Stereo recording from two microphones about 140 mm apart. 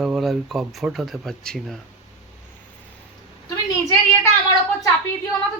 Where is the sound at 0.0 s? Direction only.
Centre (ahead or behind).